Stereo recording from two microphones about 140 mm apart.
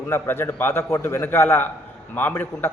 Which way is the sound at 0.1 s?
15° left (ahead or behind).